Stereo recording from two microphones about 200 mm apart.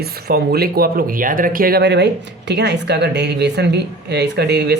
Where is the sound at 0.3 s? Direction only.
50° right (ahead or behind).